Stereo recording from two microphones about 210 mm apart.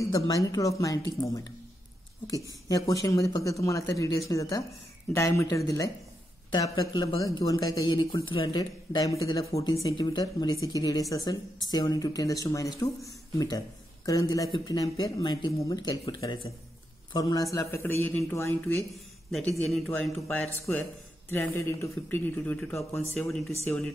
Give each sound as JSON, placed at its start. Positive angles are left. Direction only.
{"t": 0.0, "sound": "a woman's voice", "side_deg": 15}
{"t": 2.7, "sound": "a woman's voice", "side_deg": 15}
{"t": 19.9, "sound": "a woman's voice", "side_deg": 5}